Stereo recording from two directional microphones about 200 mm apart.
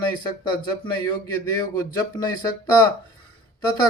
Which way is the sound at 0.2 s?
20° left (ahead or behind).